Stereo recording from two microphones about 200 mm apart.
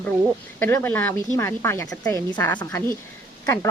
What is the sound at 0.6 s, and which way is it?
A woman's voice, 10° left (ahead or behind).